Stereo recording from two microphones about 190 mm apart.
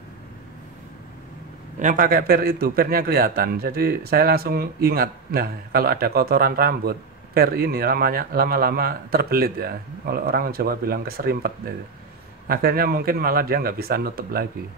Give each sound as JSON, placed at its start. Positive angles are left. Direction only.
{"t": 1.8, "sound": "a man's voice", "side_deg": -45}